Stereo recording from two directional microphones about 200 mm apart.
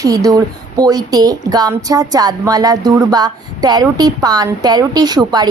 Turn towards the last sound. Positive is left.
turn(degrees=-20)  # may be behind; listen again after turning